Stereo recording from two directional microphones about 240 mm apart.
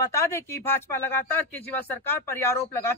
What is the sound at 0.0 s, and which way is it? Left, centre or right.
Speech, centre.